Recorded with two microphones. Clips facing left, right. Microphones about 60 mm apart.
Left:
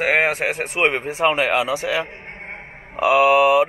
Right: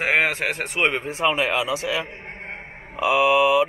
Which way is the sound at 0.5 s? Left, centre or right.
Centre.